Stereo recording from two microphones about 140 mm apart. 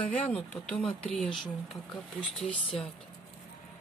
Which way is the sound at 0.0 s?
5° left (ahead or behind).